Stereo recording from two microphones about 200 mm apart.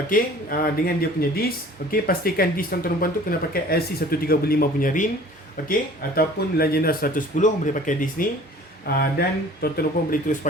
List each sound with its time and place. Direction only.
0.1 s speech: 45° left (ahead or behind)